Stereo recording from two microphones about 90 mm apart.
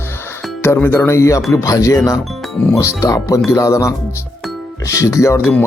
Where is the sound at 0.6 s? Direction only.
25° left (ahead or behind).